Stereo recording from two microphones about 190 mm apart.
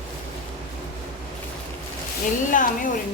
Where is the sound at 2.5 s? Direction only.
45° left (ahead or behind).